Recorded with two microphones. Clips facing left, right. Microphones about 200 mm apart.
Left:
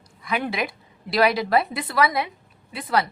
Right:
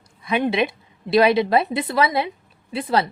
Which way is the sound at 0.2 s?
25° right (ahead or behind).